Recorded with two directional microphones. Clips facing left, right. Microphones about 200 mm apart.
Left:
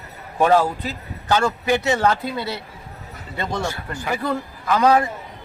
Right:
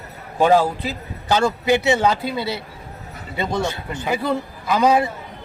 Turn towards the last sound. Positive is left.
turn(degrees=-15)  # may be behind; listen again after turning